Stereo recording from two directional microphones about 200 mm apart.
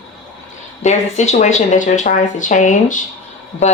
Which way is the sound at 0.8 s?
35° left (ahead or behind).